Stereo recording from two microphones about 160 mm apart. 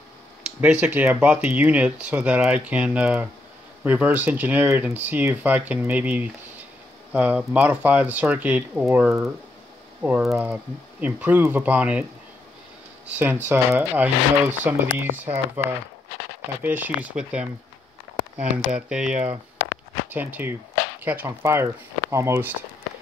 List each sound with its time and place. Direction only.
0.6 s speech: 10° right (ahead or behind)
16.6 s speech: 10° right (ahead or behind)